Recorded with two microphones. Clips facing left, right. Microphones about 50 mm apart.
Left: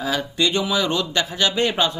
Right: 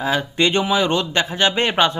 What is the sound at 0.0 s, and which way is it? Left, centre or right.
A man's voice, right.